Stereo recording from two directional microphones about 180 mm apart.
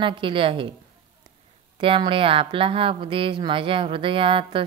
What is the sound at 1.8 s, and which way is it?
Speech, 30° right (ahead or behind).